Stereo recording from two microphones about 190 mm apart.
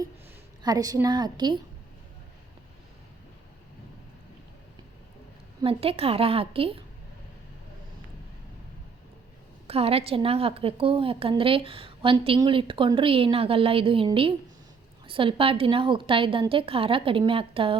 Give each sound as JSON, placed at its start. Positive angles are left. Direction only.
{"t": 0.6, "sound": "a woman's voice", "side_deg": -20}
{"t": 5.6, "sound": "a woman's voice", "side_deg": -30}
{"t": 9.6, "sound": "a woman's voice", "side_deg": -30}